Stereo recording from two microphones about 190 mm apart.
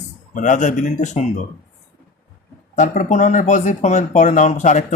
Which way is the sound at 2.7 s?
40° left (ahead or behind).